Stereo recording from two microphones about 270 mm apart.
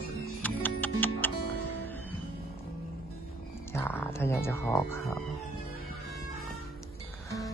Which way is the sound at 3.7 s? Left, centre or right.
Centre.